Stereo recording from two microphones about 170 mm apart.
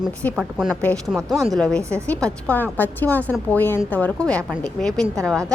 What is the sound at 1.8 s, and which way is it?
Speech, 15° right (ahead or behind).